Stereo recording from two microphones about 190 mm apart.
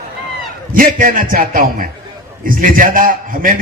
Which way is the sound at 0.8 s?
45° right (ahead or behind).